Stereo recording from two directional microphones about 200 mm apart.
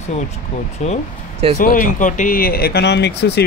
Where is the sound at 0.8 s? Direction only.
35° left (ahead or behind).